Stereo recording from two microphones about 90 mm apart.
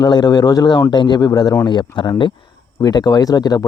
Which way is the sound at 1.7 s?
60° left (ahead or behind).